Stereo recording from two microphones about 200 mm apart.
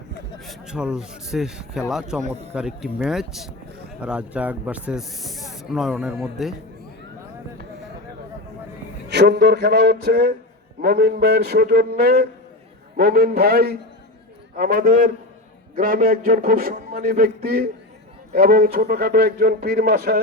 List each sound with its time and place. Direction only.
0.3 s speech: centre (ahead or behind)
9.0 s a man's voice: 55° right (ahead or behind)